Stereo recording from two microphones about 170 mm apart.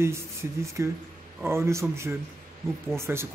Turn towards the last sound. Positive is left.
turn(degrees=-15)  # may be behind; listen again after turning